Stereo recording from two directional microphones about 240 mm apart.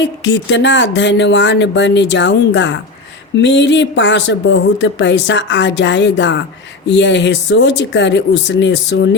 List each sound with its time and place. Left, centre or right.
0.0 s speech: left